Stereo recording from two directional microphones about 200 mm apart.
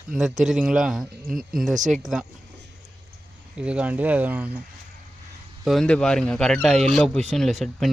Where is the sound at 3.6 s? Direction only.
5° right (ahead or behind).